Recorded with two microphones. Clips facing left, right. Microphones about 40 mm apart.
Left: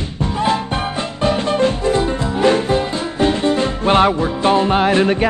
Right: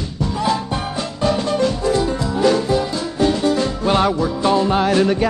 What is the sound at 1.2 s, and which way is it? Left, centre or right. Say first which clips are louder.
Music: left 2 dB; left.